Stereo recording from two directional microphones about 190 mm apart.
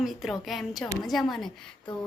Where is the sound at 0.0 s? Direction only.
Centre (ahead or behind).